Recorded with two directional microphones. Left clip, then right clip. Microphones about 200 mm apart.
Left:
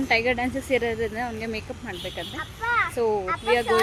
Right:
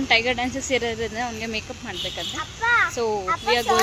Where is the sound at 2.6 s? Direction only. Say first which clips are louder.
Right 4 dB; 45° right (ahead or behind).